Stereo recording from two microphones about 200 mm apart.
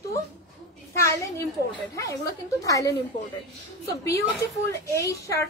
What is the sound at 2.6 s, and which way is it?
A woman's voice, 15° left (ahead or behind).